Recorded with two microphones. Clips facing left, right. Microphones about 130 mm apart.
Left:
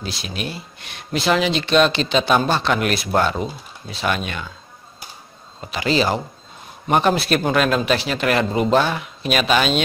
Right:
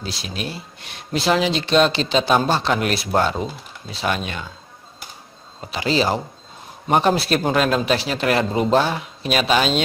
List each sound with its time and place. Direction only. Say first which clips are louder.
0.0 s speech: left 1 dB; 35° right (ahead or behind)
5.7 s speech: left 1 dB; 30° right (ahead or behind)